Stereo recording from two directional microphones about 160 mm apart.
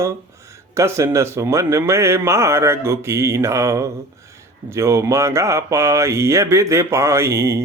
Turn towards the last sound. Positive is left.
turn(degrees=-15)  # may be behind; listen again after turning